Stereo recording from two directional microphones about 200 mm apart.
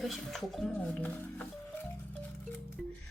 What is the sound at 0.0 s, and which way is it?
Speech, centre (ahead or behind).